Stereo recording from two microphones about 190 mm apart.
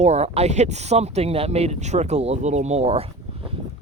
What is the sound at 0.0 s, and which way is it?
Speech, 35° right (ahead or behind).